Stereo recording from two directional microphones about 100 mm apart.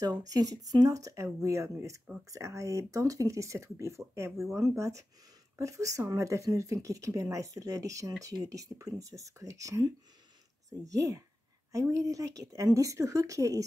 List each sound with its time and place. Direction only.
0.0 s speech: 40° right (ahead or behind)